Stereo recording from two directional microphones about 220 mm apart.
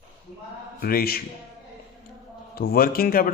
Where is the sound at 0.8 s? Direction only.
45° left (ahead or behind).